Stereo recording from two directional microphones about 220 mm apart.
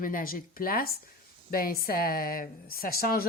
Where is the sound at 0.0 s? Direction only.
40° left (ahead or behind).